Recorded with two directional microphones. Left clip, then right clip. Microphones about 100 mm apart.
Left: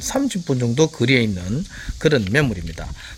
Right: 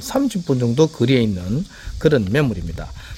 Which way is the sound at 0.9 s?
20° right (ahead or behind).